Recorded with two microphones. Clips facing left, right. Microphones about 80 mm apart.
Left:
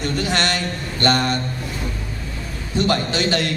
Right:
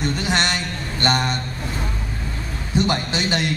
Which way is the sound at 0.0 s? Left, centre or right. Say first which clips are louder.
Even; right.